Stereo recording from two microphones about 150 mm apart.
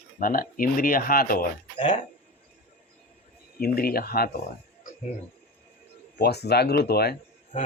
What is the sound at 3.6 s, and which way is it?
Speech, 85° left.